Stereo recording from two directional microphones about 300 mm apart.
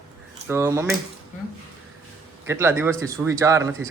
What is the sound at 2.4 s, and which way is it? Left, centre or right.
Speech, centre.